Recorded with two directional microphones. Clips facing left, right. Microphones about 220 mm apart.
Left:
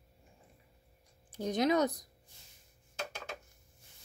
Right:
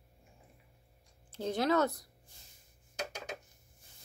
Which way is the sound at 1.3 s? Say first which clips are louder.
Left 1 dB; 15° left (ahead or behind).